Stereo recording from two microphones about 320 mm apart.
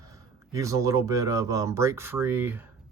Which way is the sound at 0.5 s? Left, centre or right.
Centre.